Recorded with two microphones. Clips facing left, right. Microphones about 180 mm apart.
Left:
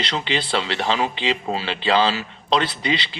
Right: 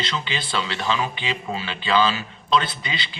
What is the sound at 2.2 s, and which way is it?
Speech, 80° left.